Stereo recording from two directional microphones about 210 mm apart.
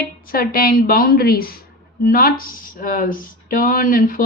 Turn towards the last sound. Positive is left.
turn(degrees=40)  # may be behind; listen again after turning